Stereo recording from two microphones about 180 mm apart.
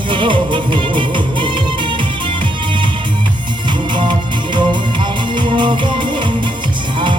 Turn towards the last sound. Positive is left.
turn(degrees=-25)  # may be behind; listen again after turning